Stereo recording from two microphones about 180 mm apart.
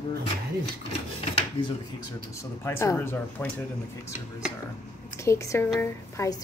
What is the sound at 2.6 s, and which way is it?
Speech, 15° left (ahead or behind).